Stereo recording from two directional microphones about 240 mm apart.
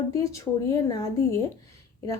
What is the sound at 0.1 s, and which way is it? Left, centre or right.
A woman's voice, centre.